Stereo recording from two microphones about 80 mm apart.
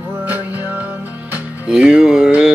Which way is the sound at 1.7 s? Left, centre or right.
Centre.